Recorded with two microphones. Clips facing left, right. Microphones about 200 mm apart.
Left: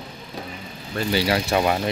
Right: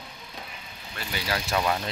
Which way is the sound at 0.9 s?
30° left (ahead or behind).